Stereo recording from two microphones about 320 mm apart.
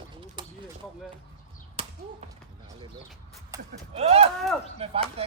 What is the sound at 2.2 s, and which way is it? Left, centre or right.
Speech, centre.